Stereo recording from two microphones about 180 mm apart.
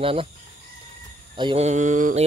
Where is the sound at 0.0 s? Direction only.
30° right (ahead or behind).